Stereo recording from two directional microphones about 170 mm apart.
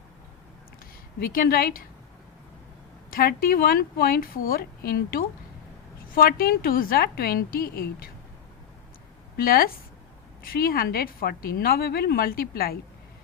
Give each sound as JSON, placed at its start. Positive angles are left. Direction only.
{"t": 1.2, "sound": "a woman's voice", "side_deg": 65}
{"t": 3.1, "sound": "a woman's voice", "side_deg": 60}
{"t": 9.4, "sound": "a woman's voice", "side_deg": 60}